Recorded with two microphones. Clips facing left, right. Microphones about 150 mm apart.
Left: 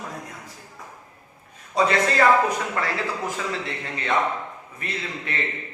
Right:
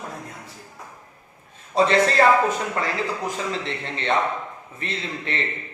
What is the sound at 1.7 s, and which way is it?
Speech, 30° right (ahead or behind).